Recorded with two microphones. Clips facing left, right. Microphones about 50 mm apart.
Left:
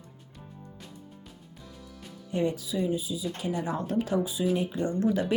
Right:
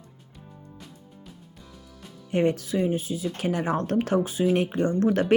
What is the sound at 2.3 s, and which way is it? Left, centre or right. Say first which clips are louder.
Speech: right 5 dB; right.